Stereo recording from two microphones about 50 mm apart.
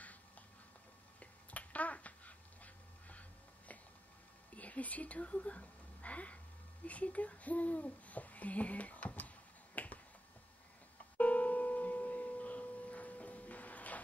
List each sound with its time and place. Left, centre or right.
1.2 s dog: left
4.6 s speech: left
9.8 s finger snapping: left
11.1 s tuning fork: left